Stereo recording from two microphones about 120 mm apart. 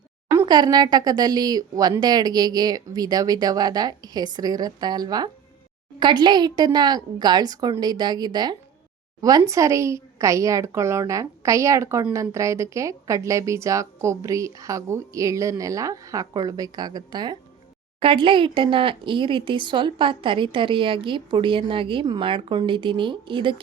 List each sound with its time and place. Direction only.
0.4 s a woman's voice: 35° right (ahead or behind)
18.0 s speech: 45° right (ahead or behind)